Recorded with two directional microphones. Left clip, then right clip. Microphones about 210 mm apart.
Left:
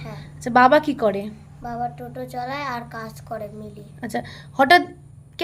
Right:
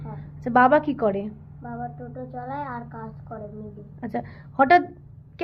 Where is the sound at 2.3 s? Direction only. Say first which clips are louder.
Left 5 dB; 30° left (ahead or behind).